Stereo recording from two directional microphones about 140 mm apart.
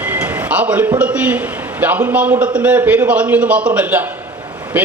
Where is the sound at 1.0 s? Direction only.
10° right (ahead or behind).